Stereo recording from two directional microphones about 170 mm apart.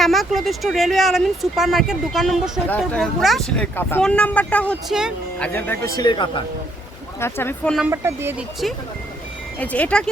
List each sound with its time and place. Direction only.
0.0 s speech: centre (ahead or behind)
3.8 s speech: 10° left (ahead or behind); by 6.4 s 25° left (ahead or behind)
7.2 s speech: 15° left (ahead or behind)
7.8 s speech: 15° right (ahead or behind)
9.6 s speech: 10° left (ahead or behind)